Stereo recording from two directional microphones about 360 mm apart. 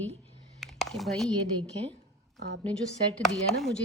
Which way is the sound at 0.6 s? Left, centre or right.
Centre.